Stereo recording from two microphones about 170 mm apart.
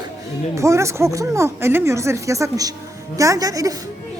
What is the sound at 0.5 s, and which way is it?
A woman's voice, 15° right (ahead or behind).